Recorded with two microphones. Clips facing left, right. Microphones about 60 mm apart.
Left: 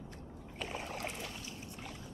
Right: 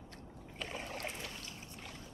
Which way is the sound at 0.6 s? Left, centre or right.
Centre.